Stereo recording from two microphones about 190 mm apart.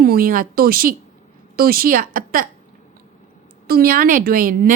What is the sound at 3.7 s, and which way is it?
A woman's voice, 50° right (ahead or behind).